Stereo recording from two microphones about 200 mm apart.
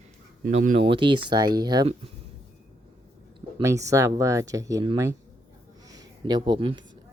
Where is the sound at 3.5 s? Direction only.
15° right (ahead or behind).